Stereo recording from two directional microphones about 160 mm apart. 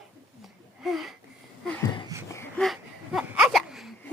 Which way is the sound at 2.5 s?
Centre (ahead or behind).